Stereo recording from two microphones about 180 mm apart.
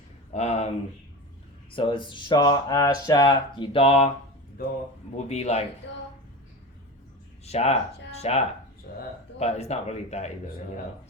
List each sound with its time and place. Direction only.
0.3 s speech: 40° left (ahead or behind)
1.7 s speech: 30° left (ahead or behind)
5.1 s speech: 40° left (ahead or behind)
7.4 s speech: 35° left (ahead or behind)
8.9 s speech: 50° left (ahead or behind)
9.4 s speech: 35° left (ahead or behind)